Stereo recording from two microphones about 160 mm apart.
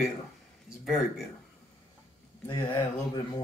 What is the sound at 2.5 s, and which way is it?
Speech, 25° left (ahead or behind).